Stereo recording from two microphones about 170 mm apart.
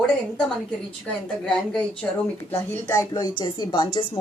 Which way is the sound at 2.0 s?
10° left (ahead or behind).